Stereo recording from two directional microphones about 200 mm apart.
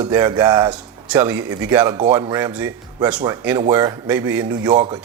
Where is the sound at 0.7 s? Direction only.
5° right (ahead or behind).